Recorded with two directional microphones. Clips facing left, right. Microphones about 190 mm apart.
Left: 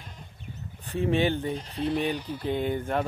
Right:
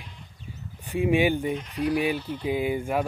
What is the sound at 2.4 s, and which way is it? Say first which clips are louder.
Speech: right 1 dB; 10° right (ahead or behind).